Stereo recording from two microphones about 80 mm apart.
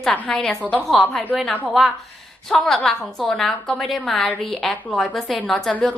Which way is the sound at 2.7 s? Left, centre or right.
Centre.